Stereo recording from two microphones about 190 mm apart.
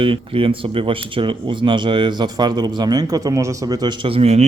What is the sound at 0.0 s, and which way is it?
Speech, 25° right (ahead or behind).